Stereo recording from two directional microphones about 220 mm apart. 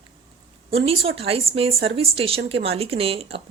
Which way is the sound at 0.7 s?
25° right (ahead or behind).